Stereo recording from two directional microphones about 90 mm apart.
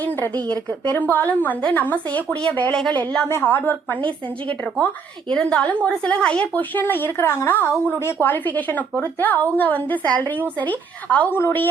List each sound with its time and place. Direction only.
0.4 s a woman's voice: 15° left (ahead or behind)